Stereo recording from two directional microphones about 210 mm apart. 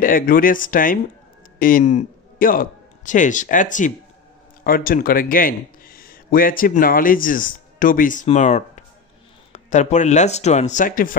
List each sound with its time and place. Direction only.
0.0 s a man's voice: 40° left (ahead or behind)